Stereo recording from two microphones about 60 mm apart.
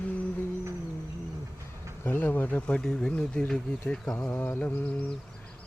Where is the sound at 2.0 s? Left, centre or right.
Left.